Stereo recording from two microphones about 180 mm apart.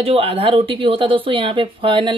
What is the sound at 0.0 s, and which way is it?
Speech, 30° right (ahead or behind).